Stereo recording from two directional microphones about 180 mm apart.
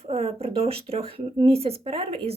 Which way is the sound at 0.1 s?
35° right (ahead or behind).